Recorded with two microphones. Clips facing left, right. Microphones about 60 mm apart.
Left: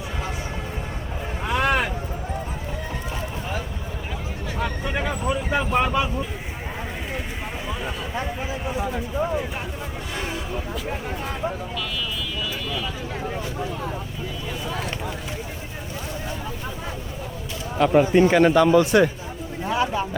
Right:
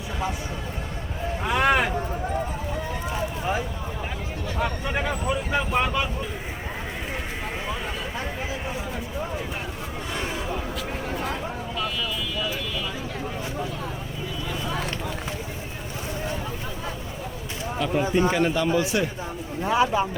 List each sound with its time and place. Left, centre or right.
1.5 s vehicle: centre
4.5 s a sound: centre
5.2 s vehicle: centre
17.7 s speech: left
19.6 s speech: centre